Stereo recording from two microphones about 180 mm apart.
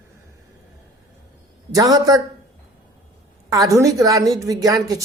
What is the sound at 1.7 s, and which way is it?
Speech, 20° right (ahead or behind).